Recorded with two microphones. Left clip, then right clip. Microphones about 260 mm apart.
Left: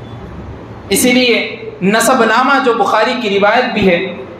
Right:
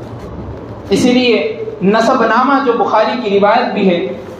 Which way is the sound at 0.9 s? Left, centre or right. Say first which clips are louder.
Even; left.